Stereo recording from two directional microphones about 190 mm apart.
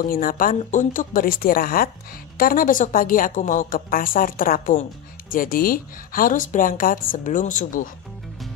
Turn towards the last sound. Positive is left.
turn(degrees=45)  # may be behind; listen again after turning